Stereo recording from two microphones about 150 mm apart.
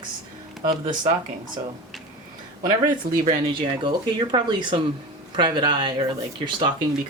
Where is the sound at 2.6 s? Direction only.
25° right (ahead or behind).